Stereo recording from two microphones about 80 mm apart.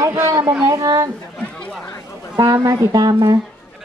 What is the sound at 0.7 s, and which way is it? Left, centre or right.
Speech, right.